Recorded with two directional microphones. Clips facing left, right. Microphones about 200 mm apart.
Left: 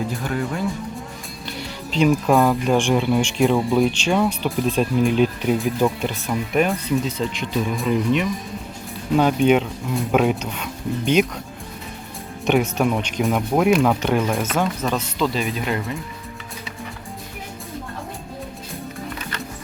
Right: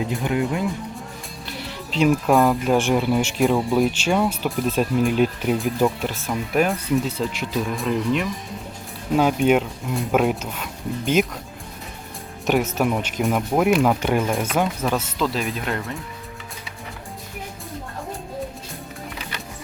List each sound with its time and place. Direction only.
0.1 s speech: 15° right (ahead or behind)
1.5 s speech: centre (ahead or behind)
12.7 s speech: 5° right (ahead or behind)